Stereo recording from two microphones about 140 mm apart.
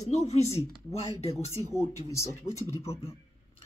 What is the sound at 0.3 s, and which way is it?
A woman's voice, 50° left (ahead or behind).